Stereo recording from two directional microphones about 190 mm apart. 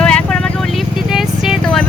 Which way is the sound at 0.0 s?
5° left (ahead or behind).